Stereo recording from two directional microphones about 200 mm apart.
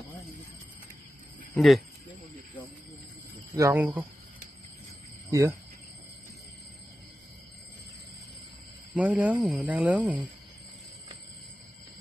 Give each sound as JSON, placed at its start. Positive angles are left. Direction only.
{"t": 1.5, "sound": "speech", "side_deg": 0}
{"t": 3.5, "sound": "speech", "side_deg": -10}
{"t": 5.3, "sound": "speech", "side_deg": -15}
{"t": 8.9, "sound": "speech", "side_deg": -5}